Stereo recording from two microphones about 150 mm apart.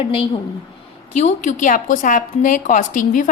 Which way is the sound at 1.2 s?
55° left (ahead or behind).